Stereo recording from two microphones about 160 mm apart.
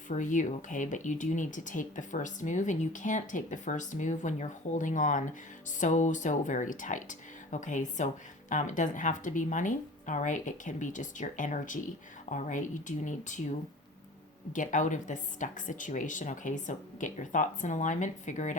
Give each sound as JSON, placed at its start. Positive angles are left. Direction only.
{"t": 0.1, "sound": "speech", "side_deg": 50}
{"t": 14.5, "sound": "speech", "side_deg": 50}